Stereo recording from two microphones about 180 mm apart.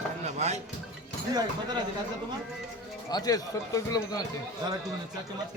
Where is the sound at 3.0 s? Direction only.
20° left (ahead or behind).